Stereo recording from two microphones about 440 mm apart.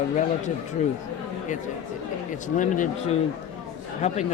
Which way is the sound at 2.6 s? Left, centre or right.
Centre.